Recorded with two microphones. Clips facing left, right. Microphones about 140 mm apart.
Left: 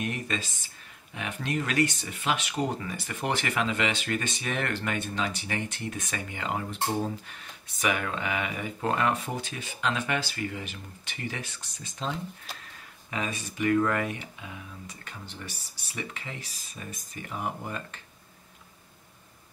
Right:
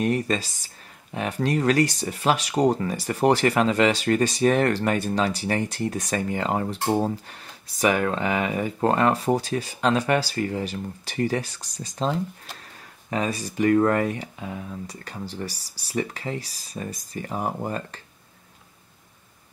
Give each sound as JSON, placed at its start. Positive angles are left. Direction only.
{"t": 0.0, "sound": "speech", "side_deg": -35}